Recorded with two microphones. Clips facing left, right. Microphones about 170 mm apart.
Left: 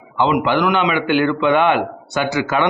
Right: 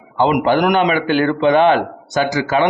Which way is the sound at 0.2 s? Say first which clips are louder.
Right 2 dB; 40° right (ahead or behind).